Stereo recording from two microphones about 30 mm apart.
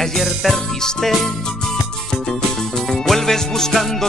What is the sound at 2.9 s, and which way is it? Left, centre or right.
Music, centre.